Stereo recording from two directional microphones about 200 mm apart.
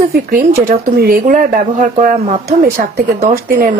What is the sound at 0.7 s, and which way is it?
Speech, 50° right (ahead or behind).